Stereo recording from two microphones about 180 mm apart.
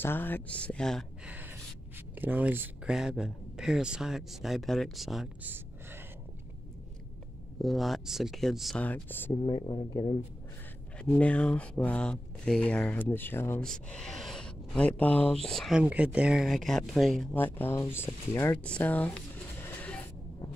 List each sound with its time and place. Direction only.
0.0 s speech: 10° left (ahead or behind)
2.1 s speech: 10° right (ahead or behind)
7.6 s speech: centre (ahead or behind); by 10.1 s 20° left (ahead or behind)
11.1 s speech: 10° left (ahead or behind)